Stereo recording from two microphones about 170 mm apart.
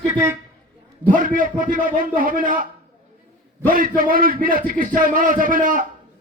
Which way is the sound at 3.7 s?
55° right (ahead or behind).